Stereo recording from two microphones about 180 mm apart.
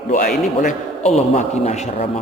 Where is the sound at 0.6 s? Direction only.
40° left (ahead or behind).